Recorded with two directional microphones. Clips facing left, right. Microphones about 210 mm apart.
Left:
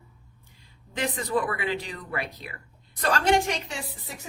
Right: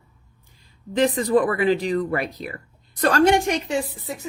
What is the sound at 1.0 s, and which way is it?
Speech, 35° right (ahead or behind).